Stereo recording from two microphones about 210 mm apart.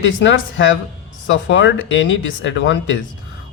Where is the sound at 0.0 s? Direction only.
60° left (ahead or behind).